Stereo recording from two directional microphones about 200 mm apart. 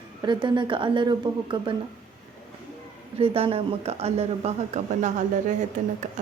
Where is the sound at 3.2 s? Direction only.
30° right (ahead or behind).